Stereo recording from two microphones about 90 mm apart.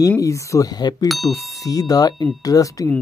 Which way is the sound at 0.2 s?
35° left (ahead or behind).